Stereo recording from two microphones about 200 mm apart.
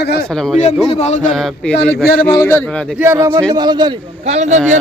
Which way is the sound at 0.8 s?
30° left (ahead or behind).